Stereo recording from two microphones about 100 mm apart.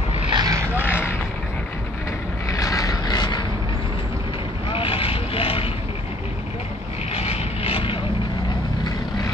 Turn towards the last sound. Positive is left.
turn(degrees=60)  # may be behind; listen again after turning